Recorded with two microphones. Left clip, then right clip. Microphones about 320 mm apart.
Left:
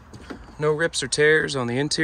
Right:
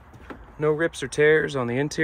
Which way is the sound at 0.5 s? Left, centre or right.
Centre.